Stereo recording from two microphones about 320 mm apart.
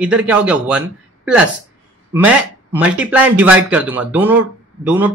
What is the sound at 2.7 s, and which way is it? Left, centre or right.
Speech, centre.